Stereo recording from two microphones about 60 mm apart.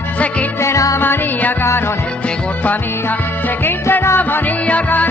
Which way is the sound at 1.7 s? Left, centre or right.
Left.